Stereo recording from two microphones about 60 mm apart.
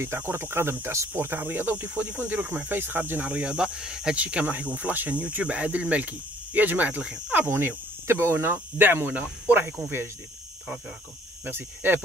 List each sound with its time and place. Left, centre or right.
0.0 s speech: right
1.4 s speech: right
7.0 s speech: centre
7.4 s speech: right
11.4 s speech: right